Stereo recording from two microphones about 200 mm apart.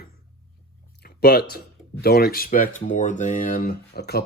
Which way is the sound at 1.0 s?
50° left (ahead or behind).